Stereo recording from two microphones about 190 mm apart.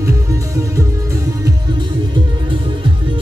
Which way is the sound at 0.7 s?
15° right (ahead or behind).